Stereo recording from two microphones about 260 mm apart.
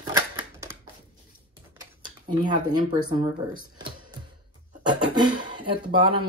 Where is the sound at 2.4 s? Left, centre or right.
Centre.